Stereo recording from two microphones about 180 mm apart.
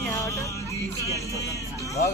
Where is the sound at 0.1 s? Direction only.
15° left (ahead or behind).